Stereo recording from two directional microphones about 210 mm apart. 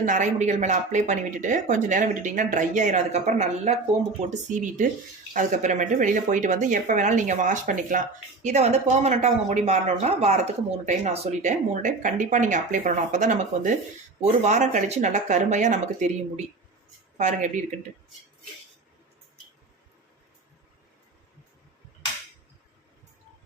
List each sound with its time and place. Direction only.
0.0 s speech: 40° right (ahead or behind)
17.2 s speech: 35° right (ahead or behind)